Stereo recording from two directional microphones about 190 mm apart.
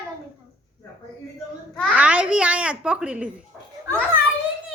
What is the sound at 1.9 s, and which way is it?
A child's voice, 5° right (ahead or behind).